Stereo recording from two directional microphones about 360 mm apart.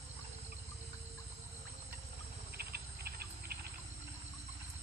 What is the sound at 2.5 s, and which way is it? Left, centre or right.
Cricket, right.